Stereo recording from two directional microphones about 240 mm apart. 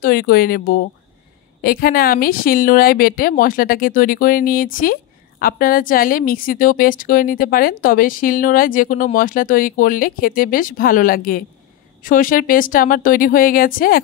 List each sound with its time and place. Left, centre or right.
0.0 s a woman's voice: left